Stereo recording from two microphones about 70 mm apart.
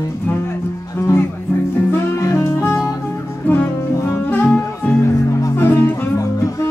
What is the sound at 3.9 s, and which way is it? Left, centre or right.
Music, left.